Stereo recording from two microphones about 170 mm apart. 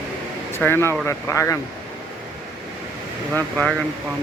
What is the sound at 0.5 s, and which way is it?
Speech, 15° left (ahead or behind).